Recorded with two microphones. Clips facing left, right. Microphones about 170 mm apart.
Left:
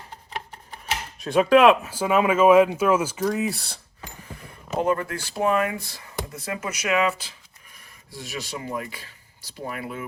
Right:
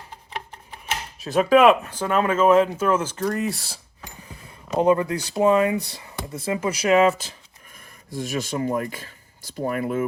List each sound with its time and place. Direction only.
1.2 s speech: centre (ahead or behind)
4.8 s speech: 20° right (ahead or behind); by 10.1 s 45° right (ahead or behind)